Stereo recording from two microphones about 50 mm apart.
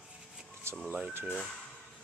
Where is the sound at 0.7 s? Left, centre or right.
Right.